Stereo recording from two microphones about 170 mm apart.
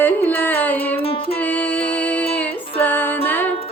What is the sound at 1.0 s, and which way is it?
Music, 35° left (ahead or behind).